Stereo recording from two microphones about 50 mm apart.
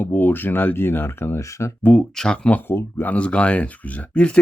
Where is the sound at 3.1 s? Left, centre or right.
Left.